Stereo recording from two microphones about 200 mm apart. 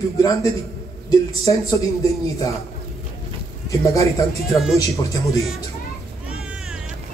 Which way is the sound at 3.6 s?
15° left (ahead or behind).